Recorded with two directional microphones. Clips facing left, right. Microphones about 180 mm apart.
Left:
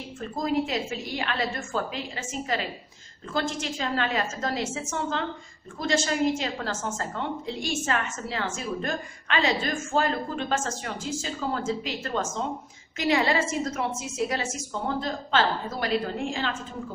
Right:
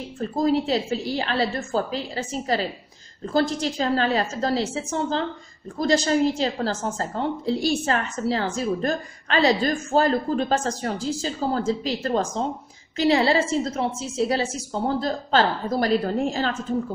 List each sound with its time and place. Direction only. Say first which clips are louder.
0.2 s a woman's voice: right 5 dB; 35° right (ahead or behind)